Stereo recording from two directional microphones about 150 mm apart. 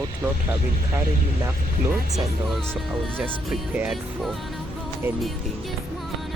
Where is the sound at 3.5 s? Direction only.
5° right (ahead or behind).